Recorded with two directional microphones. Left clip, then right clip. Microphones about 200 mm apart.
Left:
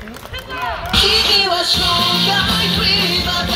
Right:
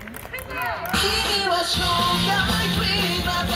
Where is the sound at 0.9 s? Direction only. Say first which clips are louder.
Left 10 dB; 30° left (ahead or behind).